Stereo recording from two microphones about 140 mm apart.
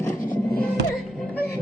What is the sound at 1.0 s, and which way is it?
Mantra, centre (ahead or behind).